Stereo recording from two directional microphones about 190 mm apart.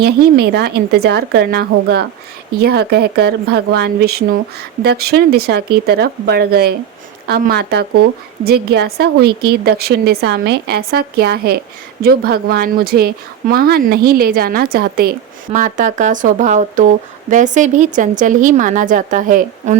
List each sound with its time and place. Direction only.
0.0 s a woman's voice: 55° right (ahead or behind)